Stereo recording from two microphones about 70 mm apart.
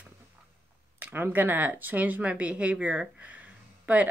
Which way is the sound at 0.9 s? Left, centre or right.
Right.